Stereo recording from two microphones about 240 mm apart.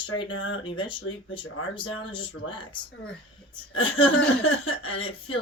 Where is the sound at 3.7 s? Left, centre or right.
Left.